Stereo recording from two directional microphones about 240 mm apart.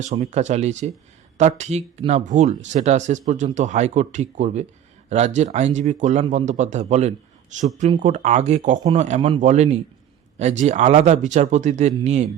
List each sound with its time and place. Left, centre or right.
0.0 s speech: right